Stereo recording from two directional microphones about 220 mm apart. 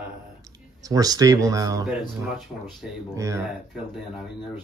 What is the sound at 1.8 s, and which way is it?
Speech, centre (ahead or behind).